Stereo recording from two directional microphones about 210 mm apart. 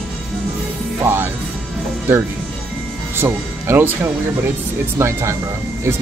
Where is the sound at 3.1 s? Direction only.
10° right (ahead or behind).